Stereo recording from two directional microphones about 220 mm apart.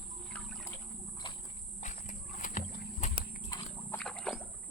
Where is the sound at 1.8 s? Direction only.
35° left (ahead or behind).